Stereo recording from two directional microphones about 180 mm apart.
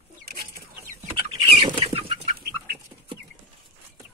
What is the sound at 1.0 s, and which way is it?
Chicken, 30° right (ahead or behind).